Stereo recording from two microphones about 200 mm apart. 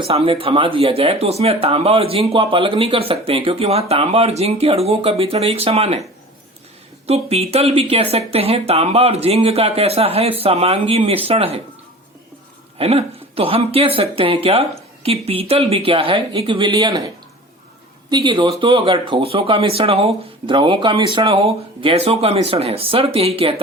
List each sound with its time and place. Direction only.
0.0 s speech: 30° right (ahead or behind)
7.1 s speech: 30° right (ahead or behind)
12.8 s speech: 30° right (ahead or behind)
18.1 s speech: 20° right (ahead or behind)